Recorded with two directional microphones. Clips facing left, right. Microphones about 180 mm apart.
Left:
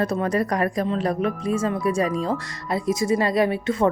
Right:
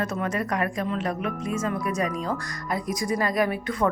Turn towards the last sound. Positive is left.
turn(degrees=25)  # may be behind; listen again after turning